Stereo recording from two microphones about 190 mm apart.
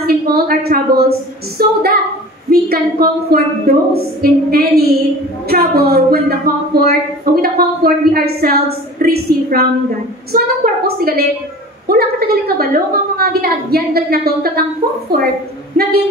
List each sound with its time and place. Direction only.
0.0 s a woman's voice: 55° right (ahead or behind)